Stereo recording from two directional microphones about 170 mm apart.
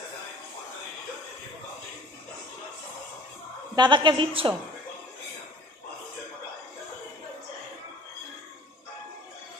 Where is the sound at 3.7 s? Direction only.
25° right (ahead or behind).